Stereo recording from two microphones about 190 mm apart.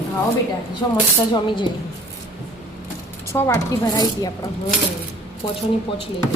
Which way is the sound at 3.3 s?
15° left (ahead or behind).